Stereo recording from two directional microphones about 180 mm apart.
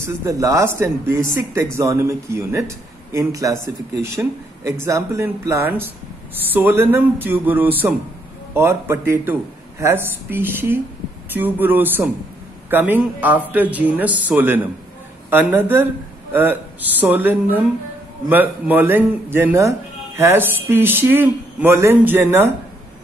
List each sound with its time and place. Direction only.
0.0 s speech: 15° right (ahead or behind)